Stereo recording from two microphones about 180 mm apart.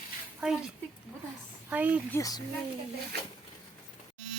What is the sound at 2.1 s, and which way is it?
Speech, 20° left (ahead or behind).